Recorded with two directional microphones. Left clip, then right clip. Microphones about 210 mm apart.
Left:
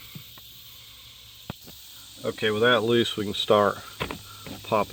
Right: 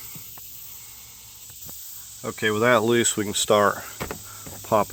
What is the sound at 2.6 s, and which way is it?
Speech, 30° right (ahead or behind).